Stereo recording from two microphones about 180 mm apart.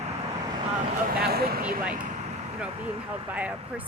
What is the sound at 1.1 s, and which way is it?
Speech, 60° right (ahead or behind).